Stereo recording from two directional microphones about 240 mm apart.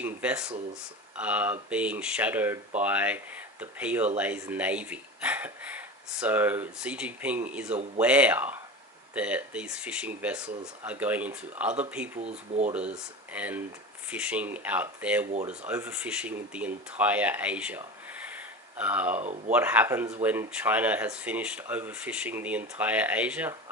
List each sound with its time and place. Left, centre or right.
0.0 s speech: centre
12.2 s speech: right
12.7 s speech: centre
18.3 s a sound: centre
19.1 s speech: right
19.5 s speech: centre